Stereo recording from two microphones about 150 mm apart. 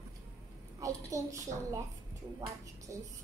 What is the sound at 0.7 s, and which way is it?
A child's voice, 20° right (ahead or behind).